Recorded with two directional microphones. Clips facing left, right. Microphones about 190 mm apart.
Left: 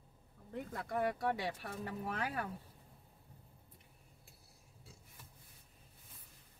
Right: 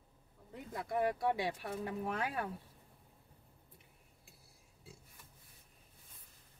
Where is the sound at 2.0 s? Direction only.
25° right (ahead or behind).